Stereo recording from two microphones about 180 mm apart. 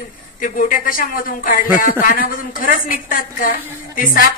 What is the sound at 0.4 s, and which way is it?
A woman's voice, 50° left (ahead or behind).